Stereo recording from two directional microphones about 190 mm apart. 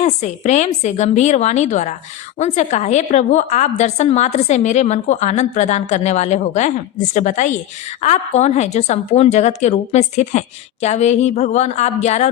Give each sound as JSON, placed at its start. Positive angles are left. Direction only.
{"t": 0.0, "sound": "a woman's voice", "side_deg": 35}